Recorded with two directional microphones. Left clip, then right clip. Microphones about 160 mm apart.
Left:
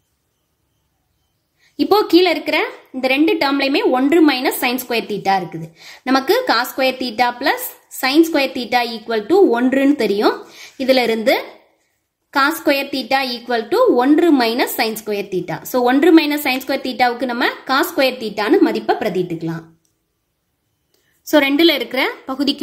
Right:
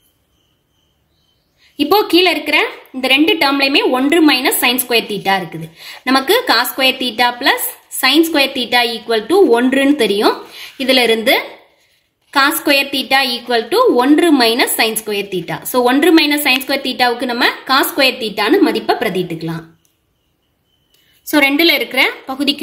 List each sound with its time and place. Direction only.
1.8 s a woman's voice: 30° left (ahead or behind)
21.3 s a woman's voice: 35° left (ahead or behind)